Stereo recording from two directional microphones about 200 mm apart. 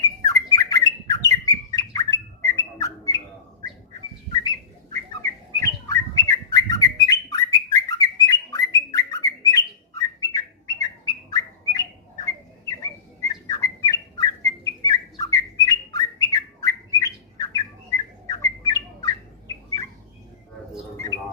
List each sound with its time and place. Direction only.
0.3 s bird: 15° left (ahead or behind)
4.3 s bird: 20° left (ahead or behind)